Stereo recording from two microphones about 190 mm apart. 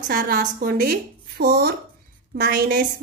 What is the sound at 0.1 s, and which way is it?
A woman's voice, 50° right (ahead or behind).